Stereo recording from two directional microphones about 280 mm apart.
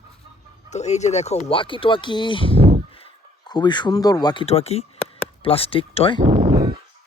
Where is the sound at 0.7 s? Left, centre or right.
Left.